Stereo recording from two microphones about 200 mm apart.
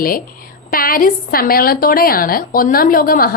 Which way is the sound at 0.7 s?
45° left (ahead or behind).